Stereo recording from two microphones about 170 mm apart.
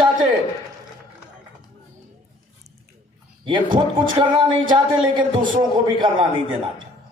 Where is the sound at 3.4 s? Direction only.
30° right (ahead or behind).